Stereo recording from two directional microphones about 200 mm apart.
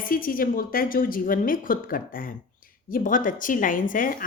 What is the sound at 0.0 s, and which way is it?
Speech, 45° left (ahead or behind).